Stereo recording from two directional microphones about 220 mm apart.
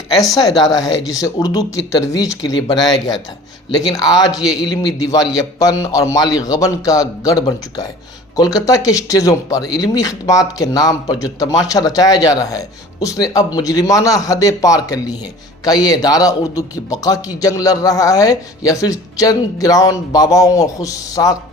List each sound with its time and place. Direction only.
0.3 s a woman's voice: 20° left (ahead or behind)